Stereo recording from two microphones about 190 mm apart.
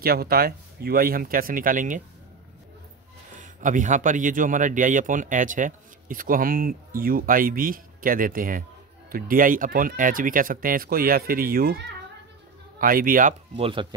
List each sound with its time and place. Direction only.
0.0 s speech: 55° right (ahead or behind)
3.3 s speech: 40° right (ahead or behind)
13.6 s speech: 30° right (ahead or behind)